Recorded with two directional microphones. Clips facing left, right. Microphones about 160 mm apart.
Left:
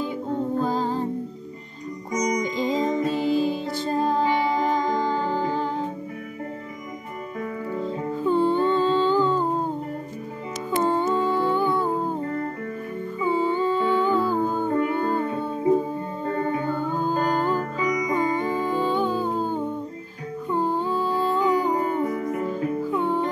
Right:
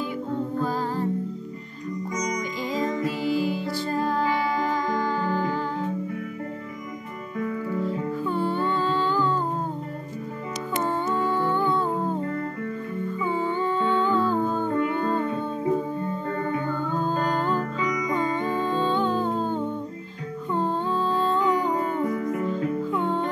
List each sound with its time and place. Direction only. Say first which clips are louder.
0.0 s music: left 2 dB; 25° left (ahead or behind)
2.1 s music: left 7 dB; 20° left (ahead or behind)
7.3 s music: right 2 dB; 25° left (ahead or behind)
10.8 s humming: left 4 dB; 15° left (ahead or behind)
11.9 s music: left 1 dB; 15° left (ahead or behind)
13.2 s humming: left 5 dB; 15° left (ahead or behind)
14.7 s music: left 1 dB; 30° left (ahead or behind); by 23.2 s 15° left (ahead or behind)